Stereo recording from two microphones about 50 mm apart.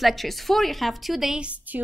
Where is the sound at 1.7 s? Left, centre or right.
Right.